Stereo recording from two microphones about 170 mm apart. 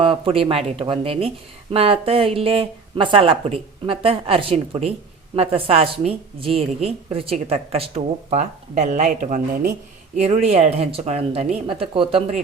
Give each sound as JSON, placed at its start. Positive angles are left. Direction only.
{"t": 0.0, "sound": "a woman's voice", "side_deg": -30}